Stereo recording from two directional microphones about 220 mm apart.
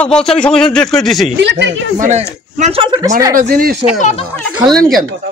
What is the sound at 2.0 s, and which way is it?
Speech, 30° right (ahead or behind).